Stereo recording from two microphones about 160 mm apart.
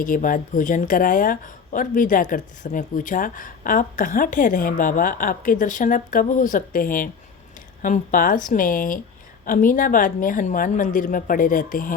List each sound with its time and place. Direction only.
0.0 s speech: 55° left (ahead or behind)